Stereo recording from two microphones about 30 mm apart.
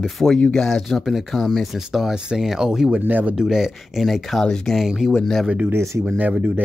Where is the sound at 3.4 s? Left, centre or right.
Centre.